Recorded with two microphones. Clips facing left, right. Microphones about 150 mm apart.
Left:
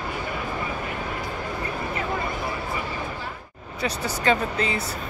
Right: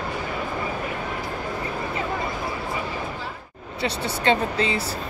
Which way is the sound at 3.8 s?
30° right (ahead or behind).